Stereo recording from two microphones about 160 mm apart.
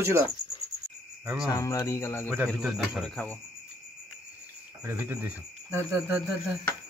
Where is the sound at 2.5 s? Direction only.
Centre (ahead or behind).